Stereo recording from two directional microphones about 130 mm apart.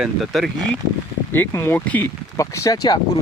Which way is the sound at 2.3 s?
25° left (ahead or behind).